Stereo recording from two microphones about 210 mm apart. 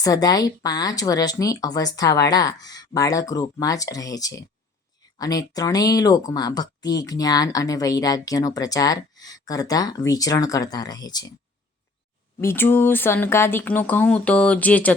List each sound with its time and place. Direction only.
0.0 s speech: 15° left (ahead or behind)
12.4 s speech: 10° left (ahead or behind)